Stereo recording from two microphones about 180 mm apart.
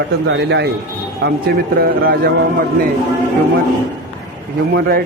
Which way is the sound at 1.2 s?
60° right (ahead or behind).